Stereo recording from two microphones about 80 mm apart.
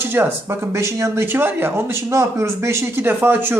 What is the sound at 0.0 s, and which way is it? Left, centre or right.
Speech, right.